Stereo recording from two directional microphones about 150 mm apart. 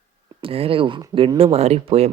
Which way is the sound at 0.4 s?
40° right (ahead or behind).